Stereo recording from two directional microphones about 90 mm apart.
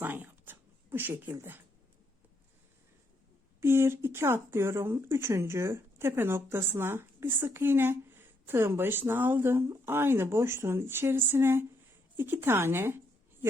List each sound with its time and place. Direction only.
0.0 s speech: 20° right (ahead or behind)
3.6 s speech: 25° right (ahead or behind)